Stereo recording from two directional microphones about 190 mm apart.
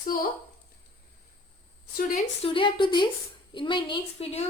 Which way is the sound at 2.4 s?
25° left (ahead or behind).